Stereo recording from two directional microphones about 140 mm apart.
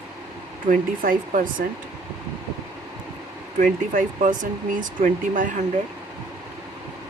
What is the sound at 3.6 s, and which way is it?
Speech, 70° right (ahead or behind).